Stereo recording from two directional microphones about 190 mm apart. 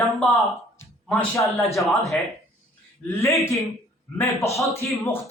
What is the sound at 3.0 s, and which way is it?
Speech, 15° left (ahead or behind).